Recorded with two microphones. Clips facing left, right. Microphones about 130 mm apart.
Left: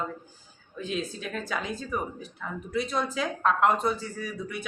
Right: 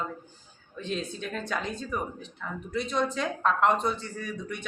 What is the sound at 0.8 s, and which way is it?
A woman's voice, 5° left (ahead or behind).